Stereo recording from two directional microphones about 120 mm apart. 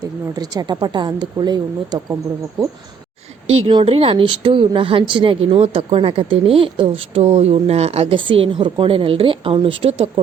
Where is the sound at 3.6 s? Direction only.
50° right (ahead or behind).